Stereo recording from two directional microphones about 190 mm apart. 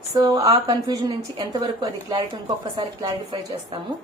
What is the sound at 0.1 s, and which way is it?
A woman's voice, 20° right (ahead or behind).